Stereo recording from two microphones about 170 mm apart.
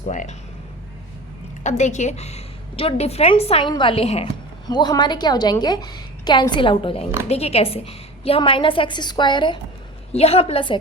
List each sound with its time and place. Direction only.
0.0 s speech: 45° left (ahead or behind)
1.6 s a woman's voice: 45° left (ahead or behind)
4.6 s a woman's voice: 25° left (ahead or behind)
10.1 s a woman's voice: 35° left (ahead or behind)